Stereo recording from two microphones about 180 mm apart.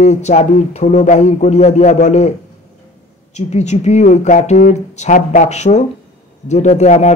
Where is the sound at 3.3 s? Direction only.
40° left (ahead or behind).